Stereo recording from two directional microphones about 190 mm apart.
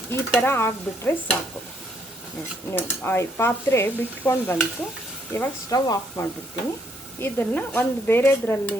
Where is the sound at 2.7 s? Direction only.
10° left (ahead or behind).